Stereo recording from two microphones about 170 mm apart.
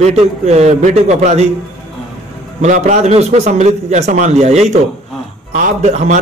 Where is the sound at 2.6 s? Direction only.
45° right (ahead or behind).